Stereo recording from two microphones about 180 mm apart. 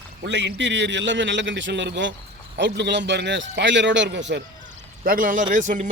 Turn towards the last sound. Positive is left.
turn(degrees=-45)  # may be behind; listen again after turning